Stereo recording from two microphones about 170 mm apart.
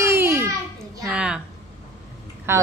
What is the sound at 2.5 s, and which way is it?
Speech, 15° right (ahead or behind).